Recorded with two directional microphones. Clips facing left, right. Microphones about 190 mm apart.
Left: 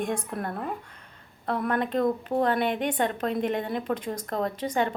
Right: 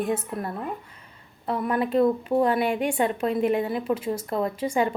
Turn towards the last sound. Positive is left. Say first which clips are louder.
# right 2 dB
turn(degrees=-10)  # may be behind; listen again after turning